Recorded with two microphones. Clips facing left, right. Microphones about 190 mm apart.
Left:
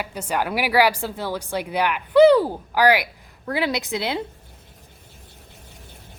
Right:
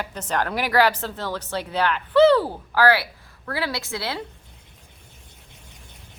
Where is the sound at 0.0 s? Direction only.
10° left (ahead or behind).